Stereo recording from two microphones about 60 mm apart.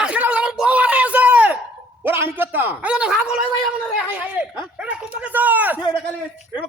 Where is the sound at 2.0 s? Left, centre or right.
Right.